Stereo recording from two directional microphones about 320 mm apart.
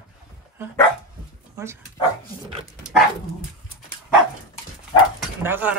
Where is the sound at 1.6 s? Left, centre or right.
Centre.